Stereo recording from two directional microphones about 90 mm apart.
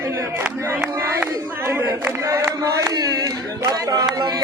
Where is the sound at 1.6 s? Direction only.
30° right (ahead or behind).